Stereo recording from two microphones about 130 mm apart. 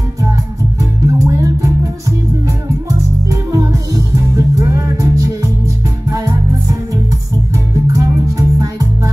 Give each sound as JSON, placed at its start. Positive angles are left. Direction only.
{"t": 0.7, "sound": "music", "side_deg": -25}
{"t": 7.9, "sound": "music", "side_deg": -25}